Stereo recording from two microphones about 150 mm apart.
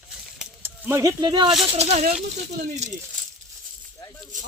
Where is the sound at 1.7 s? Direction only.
45° right (ahead or behind).